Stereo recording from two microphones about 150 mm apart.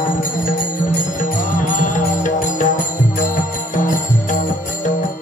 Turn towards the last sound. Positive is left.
turn(degrees=60)  # may be behind; listen again after turning